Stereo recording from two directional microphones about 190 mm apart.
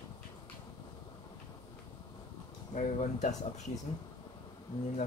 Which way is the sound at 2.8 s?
35° left (ahead or behind).